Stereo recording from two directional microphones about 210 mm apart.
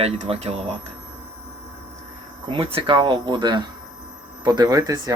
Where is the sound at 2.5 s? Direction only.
25° right (ahead or behind).